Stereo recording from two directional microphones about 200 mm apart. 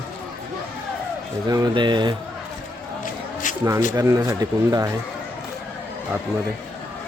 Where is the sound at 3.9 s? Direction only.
15° right (ahead or behind).